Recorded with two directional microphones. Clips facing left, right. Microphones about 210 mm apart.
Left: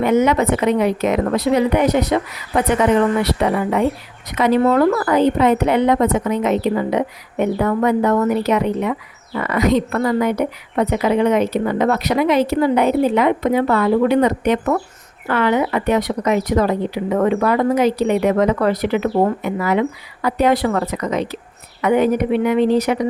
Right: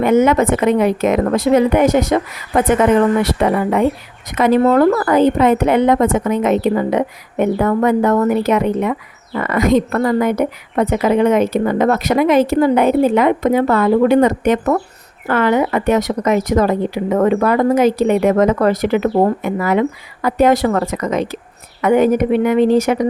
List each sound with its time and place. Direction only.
0.0 s a woman's voice: 50° right (ahead or behind)